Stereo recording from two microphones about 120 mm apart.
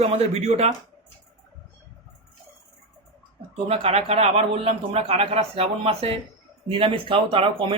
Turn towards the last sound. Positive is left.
turn(degrees=-45)  # may be behind; listen again after turning